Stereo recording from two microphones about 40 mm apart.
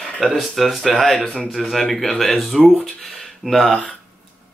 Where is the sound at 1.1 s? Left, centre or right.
Centre.